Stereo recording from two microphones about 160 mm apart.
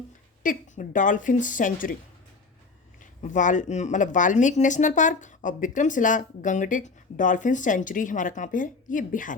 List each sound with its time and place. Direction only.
0.4 s a woman's voice: 55° left (ahead or behind)
3.0 s speech: 50° left (ahead or behind)